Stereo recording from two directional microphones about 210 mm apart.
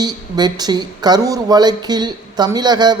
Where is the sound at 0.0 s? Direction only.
20° right (ahead or behind).